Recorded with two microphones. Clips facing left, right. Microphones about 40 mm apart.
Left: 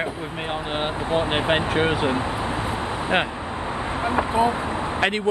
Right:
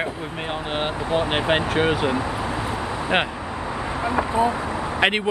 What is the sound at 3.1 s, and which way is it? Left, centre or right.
Speech, right.